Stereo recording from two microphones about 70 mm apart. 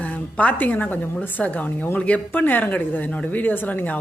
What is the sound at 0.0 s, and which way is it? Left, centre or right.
Speech, centre.